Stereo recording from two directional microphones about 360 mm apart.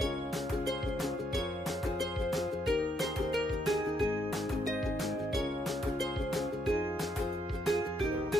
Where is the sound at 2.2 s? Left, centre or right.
Centre.